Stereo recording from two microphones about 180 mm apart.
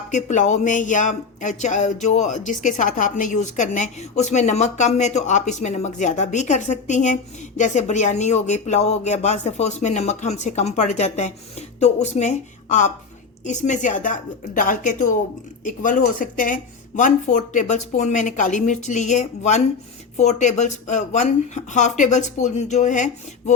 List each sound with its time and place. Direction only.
0.1 s speech: 40° left (ahead or behind)